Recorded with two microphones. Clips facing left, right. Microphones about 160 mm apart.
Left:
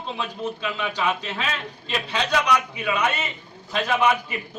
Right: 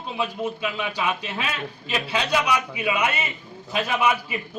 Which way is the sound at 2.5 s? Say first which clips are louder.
Left 1 dB; 10° right (ahead or behind).